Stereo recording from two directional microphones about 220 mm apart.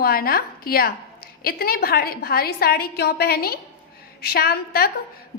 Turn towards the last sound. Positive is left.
turn(degrees=45)  # may be behind; listen again after turning